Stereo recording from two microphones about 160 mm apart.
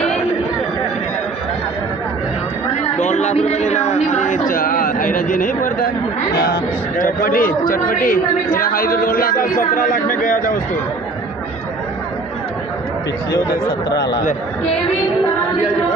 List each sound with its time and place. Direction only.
2.8 s speech: 45° left (ahead or behind)
6.3 s a woman's voice: 75° left (ahead or behind); by 10.6 s 60° left (ahead or behind)